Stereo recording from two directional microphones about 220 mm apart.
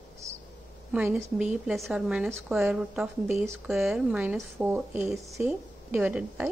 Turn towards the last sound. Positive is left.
turn(degrees=-5)  # may be behind; listen again after turning